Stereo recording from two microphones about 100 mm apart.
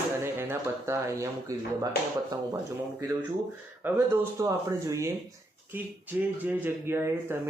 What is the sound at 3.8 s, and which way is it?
Speech, 20° right (ahead or behind).